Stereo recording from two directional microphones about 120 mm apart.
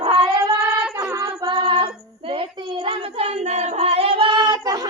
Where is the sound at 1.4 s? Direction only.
40° right (ahead or behind).